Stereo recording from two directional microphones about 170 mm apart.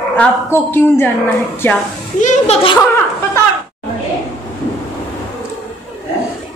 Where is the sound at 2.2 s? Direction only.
40° left (ahead or behind).